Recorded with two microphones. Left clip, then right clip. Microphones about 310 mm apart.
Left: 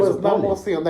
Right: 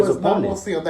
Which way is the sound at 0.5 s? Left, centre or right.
Centre.